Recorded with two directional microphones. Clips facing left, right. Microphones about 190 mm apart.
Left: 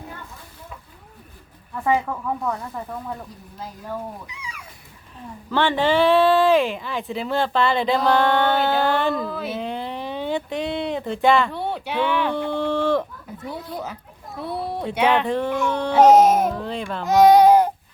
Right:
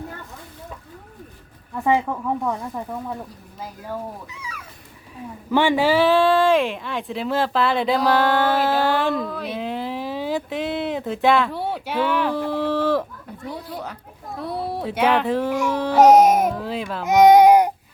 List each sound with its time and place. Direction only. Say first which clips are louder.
1.7 s speech: right 1 dB; 15° right (ahead or behind)
4.3 s speech: right 1 dB; 15° left (ahead or behind)
5.1 s speech: right 3 dB; 10° right (ahead or behind)
17.1 s baby cry: right 1 dB; 20° right (ahead or behind)